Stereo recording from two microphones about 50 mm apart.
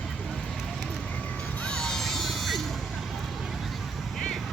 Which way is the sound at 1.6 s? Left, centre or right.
Centre.